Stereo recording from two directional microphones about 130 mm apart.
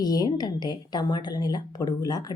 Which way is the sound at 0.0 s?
30° left (ahead or behind).